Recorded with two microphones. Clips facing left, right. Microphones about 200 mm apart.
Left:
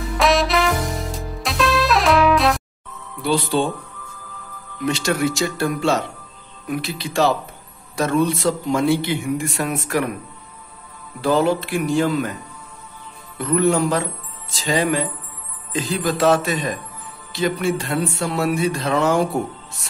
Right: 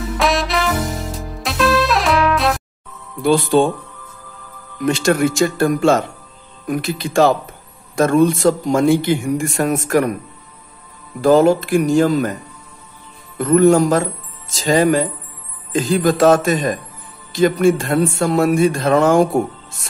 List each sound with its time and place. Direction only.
0.2 s music: centre (ahead or behind)
3.2 s a man's voice: 50° right (ahead or behind)
4.8 s a man's voice: 50° right (ahead or behind)
11.1 s a man's voice: 45° right (ahead or behind)
13.4 s a man's voice: 45° right (ahead or behind)